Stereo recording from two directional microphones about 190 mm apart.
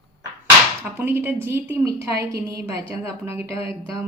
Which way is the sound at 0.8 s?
10° right (ahead or behind).